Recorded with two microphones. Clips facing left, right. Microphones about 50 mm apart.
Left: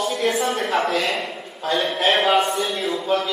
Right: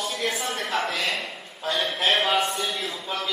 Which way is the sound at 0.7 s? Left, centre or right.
Centre.